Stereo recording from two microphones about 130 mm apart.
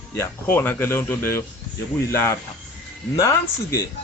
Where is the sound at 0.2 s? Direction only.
15° left (ahead or behind).